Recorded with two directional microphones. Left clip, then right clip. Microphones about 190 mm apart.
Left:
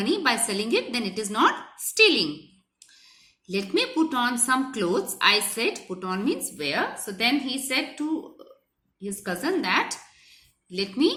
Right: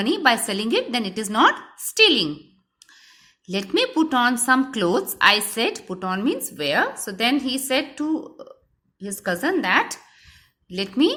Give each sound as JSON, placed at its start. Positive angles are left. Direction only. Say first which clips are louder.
{"t": 0.0, "sound": "a woman's voice", "louder": "right 5 dB", "side_deg": -45}
{"t": 3.4, "sound": "a woman's voice", "louder": "right 3 dB", "side_deg": -50}